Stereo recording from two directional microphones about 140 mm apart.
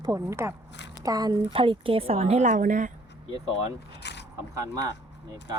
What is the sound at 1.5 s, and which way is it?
A woman's voice, 40° right (ahead or behind).